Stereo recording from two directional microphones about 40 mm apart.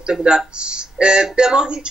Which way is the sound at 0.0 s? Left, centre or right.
Right.